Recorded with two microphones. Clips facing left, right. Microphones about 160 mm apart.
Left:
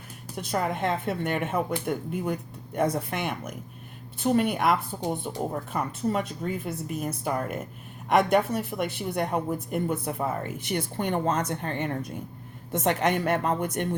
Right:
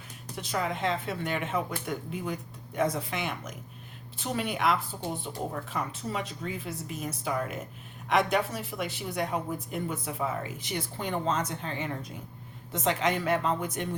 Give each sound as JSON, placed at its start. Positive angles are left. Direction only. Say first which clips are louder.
{"t": 0.3, "sound": "a woman's voice", "louder": "left 3 dB", "side_deg": 55}